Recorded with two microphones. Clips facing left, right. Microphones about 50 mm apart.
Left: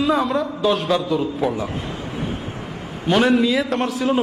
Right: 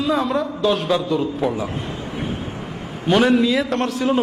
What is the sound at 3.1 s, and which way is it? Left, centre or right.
A man's voice, centre.